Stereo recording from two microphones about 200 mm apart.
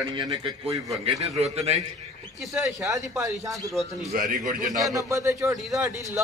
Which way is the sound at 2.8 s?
15° right (ahead or behind).